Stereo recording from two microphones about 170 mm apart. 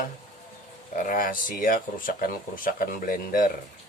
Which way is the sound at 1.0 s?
55° left (ahead or behind).